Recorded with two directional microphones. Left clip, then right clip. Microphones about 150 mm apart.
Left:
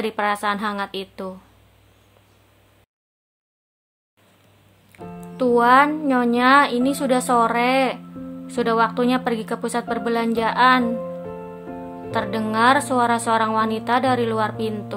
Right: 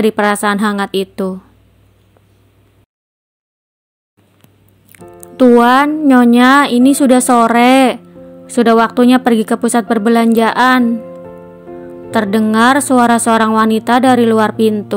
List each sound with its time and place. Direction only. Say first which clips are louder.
0.0 s speech: right 9 dB; 45° right (ahead or behind)
4.9 s music: right 11 dB; 45° right (ahead or behind)
6.0 s speech: right 9 dB; 45° right (ahead or behind)
12.1 s speech: right 10 dB; 45° right (ahead or behind)